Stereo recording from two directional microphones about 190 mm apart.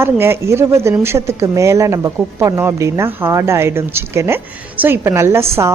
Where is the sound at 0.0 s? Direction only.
15° right (ahead or behind).